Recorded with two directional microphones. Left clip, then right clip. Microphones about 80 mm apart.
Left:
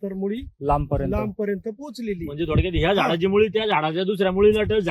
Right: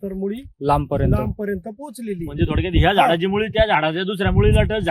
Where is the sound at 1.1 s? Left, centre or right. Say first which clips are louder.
Right 1 dB; right.